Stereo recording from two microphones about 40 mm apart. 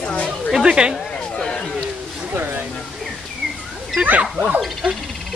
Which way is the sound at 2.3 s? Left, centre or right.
Right.